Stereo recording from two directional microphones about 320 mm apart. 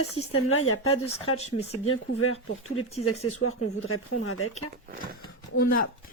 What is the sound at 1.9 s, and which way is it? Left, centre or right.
Speech, left.